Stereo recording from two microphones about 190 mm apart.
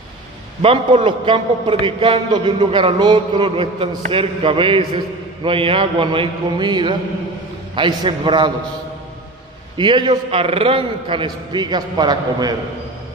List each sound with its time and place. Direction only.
0.6 s a man's voice: 30° right (ahead or behind)
9.8 s a man's voice: 25° right (ahead or behind)